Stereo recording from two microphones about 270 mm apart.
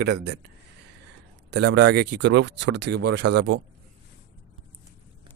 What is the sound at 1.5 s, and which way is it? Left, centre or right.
Speech, right.